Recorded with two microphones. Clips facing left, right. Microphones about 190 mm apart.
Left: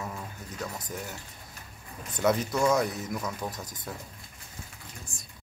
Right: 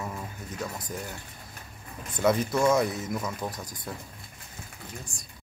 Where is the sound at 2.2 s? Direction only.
5° right (ahead or behind).